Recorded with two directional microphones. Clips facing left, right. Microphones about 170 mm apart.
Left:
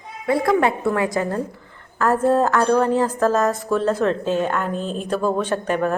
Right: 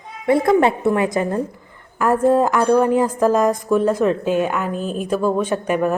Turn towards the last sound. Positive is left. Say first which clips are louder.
# right 2 dB
turn(degrees=-10)  # may be behind; listen again after turning